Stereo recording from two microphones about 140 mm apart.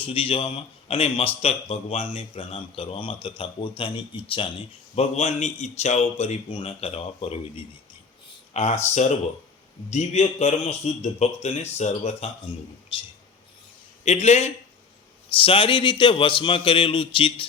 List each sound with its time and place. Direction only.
0.0 s a man's voice: 40° left (ahead or behind)
4.9 s a man's voice: 50° left (ahead or behind)
8.5 s a man's voice: 55° left (ahead or behind)
12.9 s speech: 40° left (ahead or behind)
14.0 s a man's voice: 50° left (ahead or behind)
15.4 s speech: 40° left (ahead or behind)